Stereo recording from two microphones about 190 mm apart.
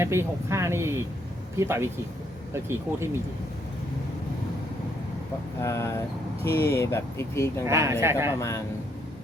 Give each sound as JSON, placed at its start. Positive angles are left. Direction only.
{"t": 0.0, "sound": "speech", "side_deg": -15}
{"t": 5.5, "sound": "speech", "side_deg": 15}
{"t": 7.7, "sound": "speech", "side_deg": -15}
{"t": 8.4, "sound": "speech", "side_deg": 15}